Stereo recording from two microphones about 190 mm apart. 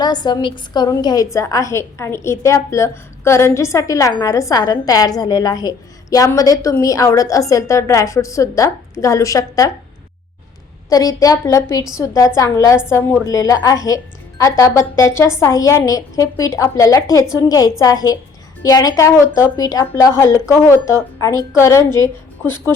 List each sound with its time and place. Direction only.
0.0 s a woman's voice: 20° left (ahead or behind)
10.8 s a woman's voice: 20° left (ahead or behind)